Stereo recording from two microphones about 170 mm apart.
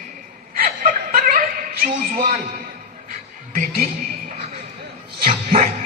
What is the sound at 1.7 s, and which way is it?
Speech, 55° right (ahead or behind).